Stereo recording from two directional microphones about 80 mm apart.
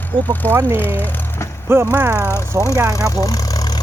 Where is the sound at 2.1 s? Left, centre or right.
Left.